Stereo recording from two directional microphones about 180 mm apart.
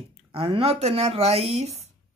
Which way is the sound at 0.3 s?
30° right (ahead or behind).